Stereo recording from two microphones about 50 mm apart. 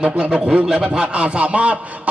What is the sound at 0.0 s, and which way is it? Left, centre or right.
A man's voice, right.